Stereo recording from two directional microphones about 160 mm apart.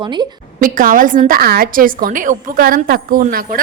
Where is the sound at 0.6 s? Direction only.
60° right (ahead or behind).